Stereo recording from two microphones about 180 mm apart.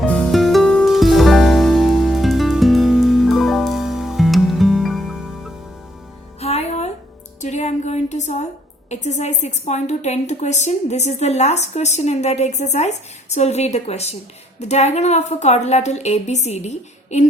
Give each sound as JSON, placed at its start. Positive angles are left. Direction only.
{"t": 0.0, "sound": "music", "side_deg": 5}
{"t": 6.4, "sound": "music", "side_deg": 35}
{"t": 7.4, "sound": "a sound", "side_deg": 40}
{"t": 8.9, "sound": "a woman's voice", "side_deg": 40}